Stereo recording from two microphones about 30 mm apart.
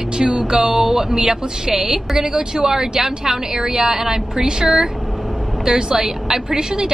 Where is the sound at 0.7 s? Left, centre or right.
Centre.